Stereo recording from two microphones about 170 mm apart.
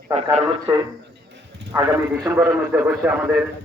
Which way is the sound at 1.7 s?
15° right (ahead or behind).